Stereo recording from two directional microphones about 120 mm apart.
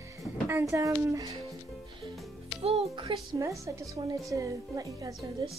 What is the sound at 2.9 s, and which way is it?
Speech, 50° right (ahead or behind).